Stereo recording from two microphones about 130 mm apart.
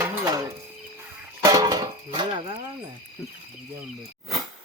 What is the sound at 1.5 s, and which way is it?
Music, 30° right (ahead or behind).